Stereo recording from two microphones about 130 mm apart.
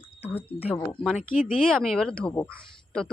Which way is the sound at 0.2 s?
15° left (ahead or behind).